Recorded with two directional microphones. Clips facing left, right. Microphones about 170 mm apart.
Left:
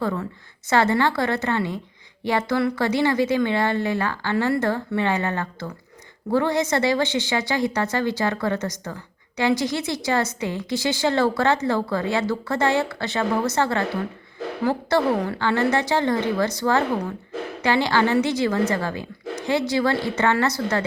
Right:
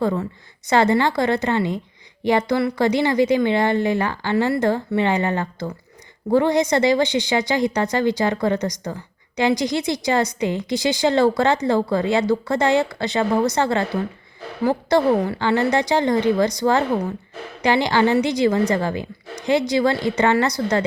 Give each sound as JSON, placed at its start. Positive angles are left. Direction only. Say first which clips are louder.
{"t": 0.0, "sound": "a woman's voice", "louder": "right 4 dB", "side_deg": -20}